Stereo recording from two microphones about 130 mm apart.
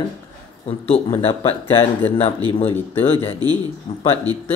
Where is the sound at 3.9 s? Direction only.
45° left (ahead or behind).